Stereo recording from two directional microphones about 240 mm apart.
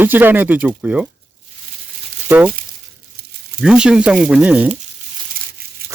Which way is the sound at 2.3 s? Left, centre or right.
Centre.